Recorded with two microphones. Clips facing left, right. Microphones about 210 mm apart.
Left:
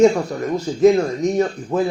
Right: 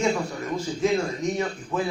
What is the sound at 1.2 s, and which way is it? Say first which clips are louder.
Speech: left 8 dB; 40° left (ahead or behind).